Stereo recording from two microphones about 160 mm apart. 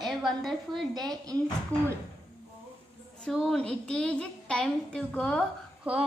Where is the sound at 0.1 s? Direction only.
Centre (ahead or behind).